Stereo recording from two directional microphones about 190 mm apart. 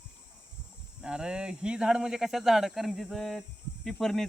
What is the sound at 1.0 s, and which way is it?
Speech, 5° right (ahead or behind).